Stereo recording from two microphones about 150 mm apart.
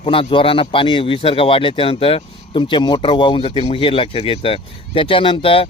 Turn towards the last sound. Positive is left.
turn(degrees=35)  # may be behind; listen again after turning